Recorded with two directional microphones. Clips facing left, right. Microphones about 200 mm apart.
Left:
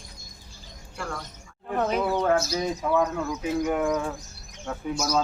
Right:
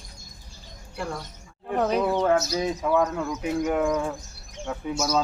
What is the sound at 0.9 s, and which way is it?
Speech, 20° right (ahead or behind).